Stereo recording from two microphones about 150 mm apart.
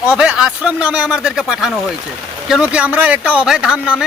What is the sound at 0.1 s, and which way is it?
Speech, 5° right (ahead or behind).